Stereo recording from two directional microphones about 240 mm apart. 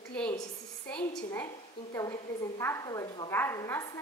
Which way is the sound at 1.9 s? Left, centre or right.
Centre.